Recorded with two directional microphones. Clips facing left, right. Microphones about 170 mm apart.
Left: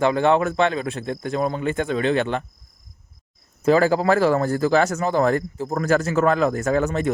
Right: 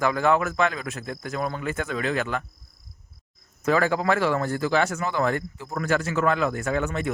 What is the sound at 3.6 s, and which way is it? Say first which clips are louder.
Speech: left 5 dB; 30° left (ahead or behind).